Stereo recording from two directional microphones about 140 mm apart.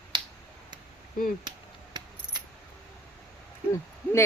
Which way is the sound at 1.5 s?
30° right (ahead or behind).